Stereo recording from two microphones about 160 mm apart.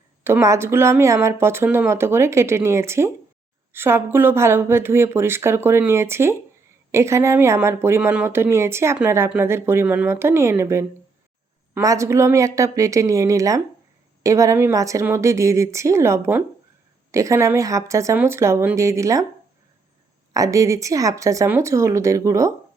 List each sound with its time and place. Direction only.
0.3 s speech: 15° right (ahead or behind)
20.3 s speech: 20° right (ahead or behind)